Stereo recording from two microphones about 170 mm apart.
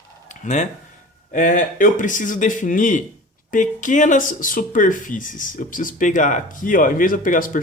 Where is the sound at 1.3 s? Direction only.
45° left (ahead or behind).